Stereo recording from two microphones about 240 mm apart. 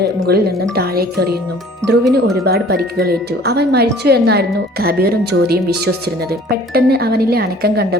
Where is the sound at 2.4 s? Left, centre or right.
Right.